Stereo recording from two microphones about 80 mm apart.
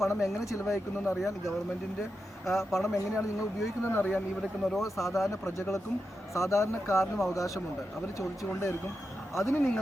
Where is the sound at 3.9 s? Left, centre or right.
Left.